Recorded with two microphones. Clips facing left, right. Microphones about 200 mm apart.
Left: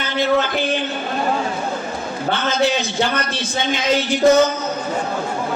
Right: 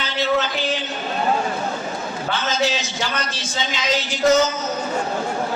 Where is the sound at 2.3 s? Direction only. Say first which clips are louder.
Left 4 dB; 60° left (ahead or behind).